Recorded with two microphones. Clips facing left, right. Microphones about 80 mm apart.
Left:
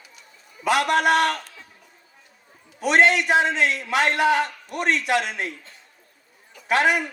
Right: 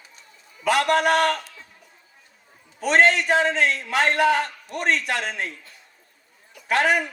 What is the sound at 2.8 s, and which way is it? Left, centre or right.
A man's voice, right.